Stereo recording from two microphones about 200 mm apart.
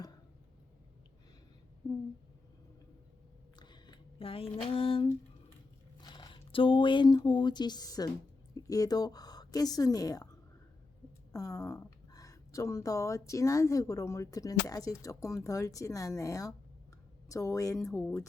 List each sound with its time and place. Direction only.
3.6 s a sound: 20° left (ahead or behind)
6.0 s speech: 20° left (ahead or behind)
11.3 s speech: 15° left (ahead or behind)